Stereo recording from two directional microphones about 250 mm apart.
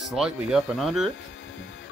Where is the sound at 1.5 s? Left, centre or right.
Left.